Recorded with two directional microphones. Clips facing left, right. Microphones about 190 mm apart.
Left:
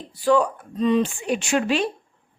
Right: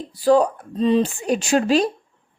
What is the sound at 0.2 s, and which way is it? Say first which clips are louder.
A woman's voice: right 3 dB; 35° right (ahead or behind).